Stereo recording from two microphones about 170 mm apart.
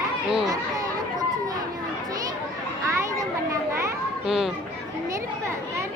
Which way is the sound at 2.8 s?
15° right (ahead or behind).